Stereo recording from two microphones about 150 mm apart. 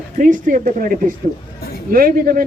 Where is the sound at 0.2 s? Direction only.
60° right (ahead or behind).